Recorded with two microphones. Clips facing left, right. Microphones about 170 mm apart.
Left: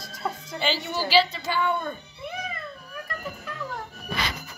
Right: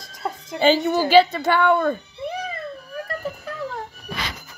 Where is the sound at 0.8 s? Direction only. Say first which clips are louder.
Right 4 dB; 50° right (ahead or behind); by 2.0 s 75° right (ahead or behind).